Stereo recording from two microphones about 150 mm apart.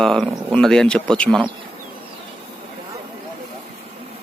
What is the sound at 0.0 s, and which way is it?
Speech, 5° left (ahead or behind).